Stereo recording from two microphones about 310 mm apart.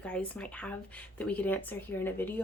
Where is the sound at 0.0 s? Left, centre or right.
Centre.